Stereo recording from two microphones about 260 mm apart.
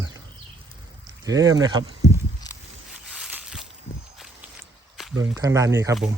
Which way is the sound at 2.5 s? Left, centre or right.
Centre.